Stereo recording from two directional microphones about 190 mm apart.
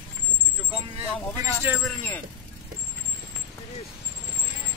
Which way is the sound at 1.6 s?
10° right (ahead or behind).